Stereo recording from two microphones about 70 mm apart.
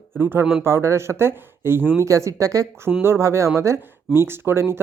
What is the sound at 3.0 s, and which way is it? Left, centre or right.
Speech, right.